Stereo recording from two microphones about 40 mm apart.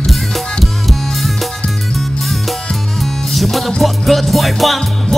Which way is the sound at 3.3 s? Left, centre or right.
Centre.